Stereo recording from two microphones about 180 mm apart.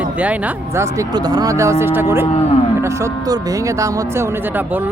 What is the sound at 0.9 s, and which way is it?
Speech, 20° right (ahead or behind).